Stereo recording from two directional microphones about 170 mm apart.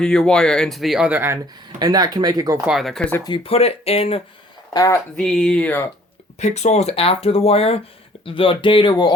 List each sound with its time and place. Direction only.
0.0 s speech: 5° left (ahead or behind); by 1.4 s 10° right (ahead or behind)
1.8 s speech: 25° right (ahead or behind)
2.6 s speech: centre (ahead or behind)
3.2 s speech: 30° left (ahead or behind)
4.7 s speech: 20° left (ahead or behind)
5.1 s speech: 5° left (ahead or behind)
6.4 s speech: 40° left (ahead or behind); by 9.1 s 25° left (ahead or behind)